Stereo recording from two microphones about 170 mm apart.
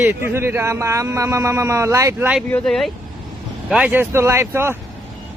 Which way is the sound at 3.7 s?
10° right (ahead or behind).